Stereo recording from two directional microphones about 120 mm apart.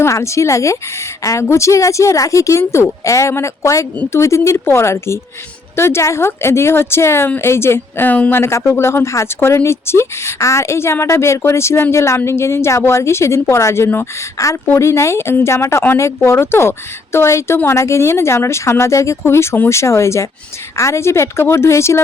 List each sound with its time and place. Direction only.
0.0 s speech: 25° left (ahead or behind)